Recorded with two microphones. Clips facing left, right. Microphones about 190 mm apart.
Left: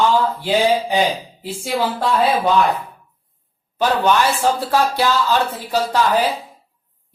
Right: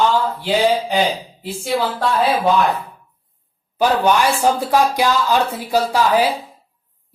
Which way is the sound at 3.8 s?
15° right (ahead or behind).